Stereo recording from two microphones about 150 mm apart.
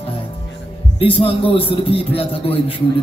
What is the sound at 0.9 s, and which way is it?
Speech, 35° left (ahead or behind).